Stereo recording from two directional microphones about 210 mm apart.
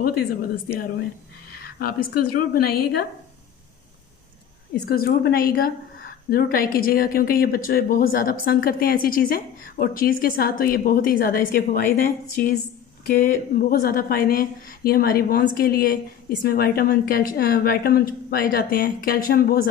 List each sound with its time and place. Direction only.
1.8 s a woman's voice: 45° left (ahead or behind)
4.8 s a woman's voice: 45° left (ahead or behind)